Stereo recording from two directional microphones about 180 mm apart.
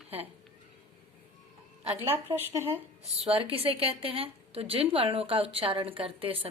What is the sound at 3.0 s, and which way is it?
A woman's voice, 35° right (ahead or behind).